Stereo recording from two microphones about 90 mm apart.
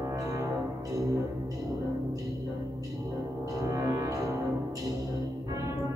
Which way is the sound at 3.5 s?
40° right (ahead or behind).